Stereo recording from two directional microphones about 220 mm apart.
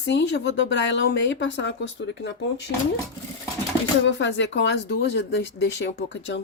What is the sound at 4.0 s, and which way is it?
Speech, 55° left (ahead or behind).